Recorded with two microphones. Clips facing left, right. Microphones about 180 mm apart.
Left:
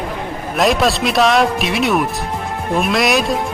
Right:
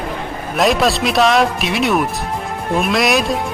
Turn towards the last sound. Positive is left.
turn(degrees=0)  # may be behind; listen again after turning